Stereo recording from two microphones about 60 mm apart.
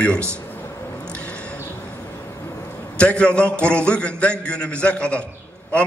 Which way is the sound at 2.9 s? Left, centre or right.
Centre.